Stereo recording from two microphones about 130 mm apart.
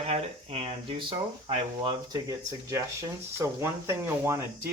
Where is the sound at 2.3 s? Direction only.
25° right (ahead or behind).